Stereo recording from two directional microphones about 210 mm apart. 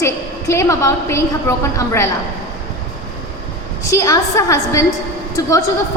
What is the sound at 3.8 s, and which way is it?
A woman's voice, 15° left (ahead or behind).